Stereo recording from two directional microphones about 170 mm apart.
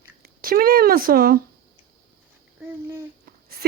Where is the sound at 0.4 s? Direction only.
60° right (ahead or behind).